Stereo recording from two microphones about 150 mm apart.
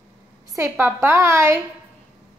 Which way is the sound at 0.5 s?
15° right (ahead or behind).